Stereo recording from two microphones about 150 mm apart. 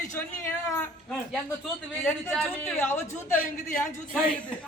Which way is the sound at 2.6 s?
15° left (ahead or behind).